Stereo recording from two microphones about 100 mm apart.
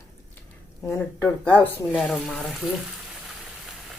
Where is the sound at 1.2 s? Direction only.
15° left (ahead or behind).